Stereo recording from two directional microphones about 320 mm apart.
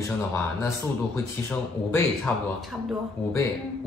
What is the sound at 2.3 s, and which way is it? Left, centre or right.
Speech, centre.